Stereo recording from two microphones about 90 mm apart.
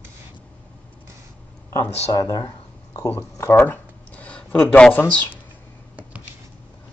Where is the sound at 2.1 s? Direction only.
45° left (ahead or behind).